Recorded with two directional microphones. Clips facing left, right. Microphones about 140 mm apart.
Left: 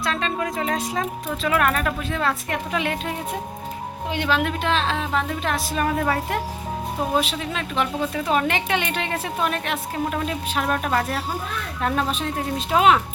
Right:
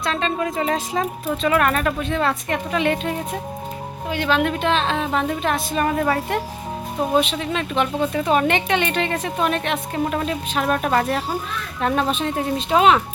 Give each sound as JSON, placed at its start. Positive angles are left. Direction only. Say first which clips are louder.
{"t": 0.0, "sound": "a woman's voice", "louder": "right 2 dB", "side_deg": 0}
{"t": 4.1, "sound": "a woman's voice", "louder": "right 2 dB", "side_deg": 15}
{"t": 4.4, "sound": "a woman's voice", "louder": "right 3 dB", "side_deg": 0}